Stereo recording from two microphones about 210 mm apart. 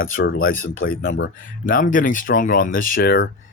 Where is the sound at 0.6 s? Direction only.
70° left (ahead or behind).